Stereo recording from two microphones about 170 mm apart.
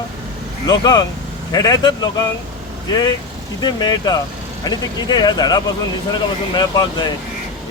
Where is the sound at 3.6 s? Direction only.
25° left (ahead or behind).